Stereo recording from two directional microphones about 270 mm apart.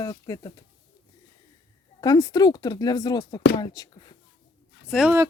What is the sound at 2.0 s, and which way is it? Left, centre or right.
Speech, centre.